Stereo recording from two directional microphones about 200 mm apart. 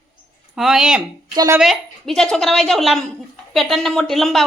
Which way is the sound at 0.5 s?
Centre (ahead or behind).